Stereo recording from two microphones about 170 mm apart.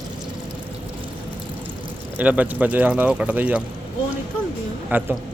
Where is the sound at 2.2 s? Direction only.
10° right (ahead or behind).